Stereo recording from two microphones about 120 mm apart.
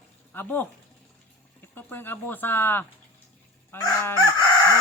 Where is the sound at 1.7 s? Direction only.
15° left (ahead or behind).